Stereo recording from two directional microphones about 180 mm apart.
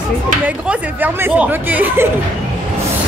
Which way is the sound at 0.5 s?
10° right (ahead or behind).